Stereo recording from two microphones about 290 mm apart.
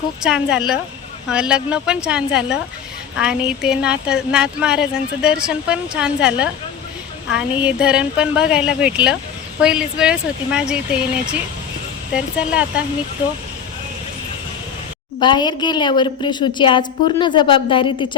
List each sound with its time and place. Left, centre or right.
0.2 s speech: centre
15.2 s a woman's voice: centre